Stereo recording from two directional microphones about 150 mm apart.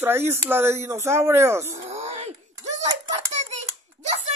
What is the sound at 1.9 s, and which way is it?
Wail, 45° right (ahead or behind).